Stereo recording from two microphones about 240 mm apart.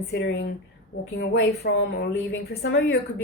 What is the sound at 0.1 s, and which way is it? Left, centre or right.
A woman's voice, left.